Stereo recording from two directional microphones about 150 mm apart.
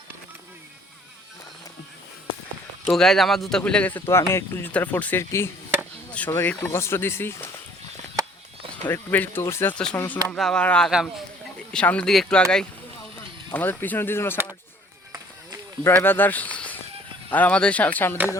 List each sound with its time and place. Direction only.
2.9 s speech: centre (ahead or behind)
8.2 s a sound: 20° right (ahead or behind)
8.9 s speech: 15° left (ahead or behind)
15.8 s speech: 15° left (ahead or behind)